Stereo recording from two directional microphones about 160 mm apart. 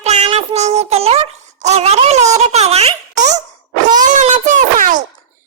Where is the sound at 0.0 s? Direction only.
45° right (ahead or behind).